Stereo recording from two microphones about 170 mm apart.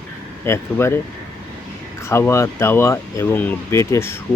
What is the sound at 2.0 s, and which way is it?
Speech, 15° left (ahead or behind).